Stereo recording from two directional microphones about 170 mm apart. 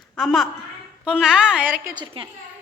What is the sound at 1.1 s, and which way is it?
Speech, 5° right (ahead or behind).